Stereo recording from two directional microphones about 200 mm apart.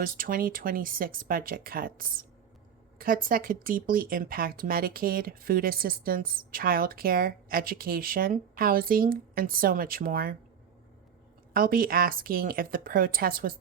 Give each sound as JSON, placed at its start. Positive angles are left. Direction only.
{"t": 0.0, "sound": "speech", "side_deg": -45}
{"t": 11.5, "sound": "speech", "side_deg": -45}